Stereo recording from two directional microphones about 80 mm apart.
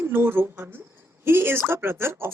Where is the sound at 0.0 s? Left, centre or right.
Right.